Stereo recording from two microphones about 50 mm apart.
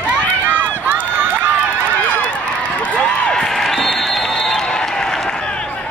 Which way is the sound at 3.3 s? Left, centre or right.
Centre.